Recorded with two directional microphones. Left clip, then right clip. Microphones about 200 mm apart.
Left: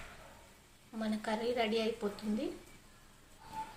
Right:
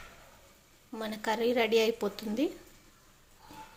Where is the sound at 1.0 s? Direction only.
40° right (ahead or behind).